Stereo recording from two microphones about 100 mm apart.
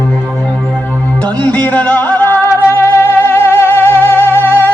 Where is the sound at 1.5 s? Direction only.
15° left (ahead or behind).